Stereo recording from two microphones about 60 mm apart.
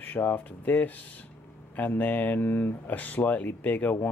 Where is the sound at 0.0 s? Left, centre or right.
Left.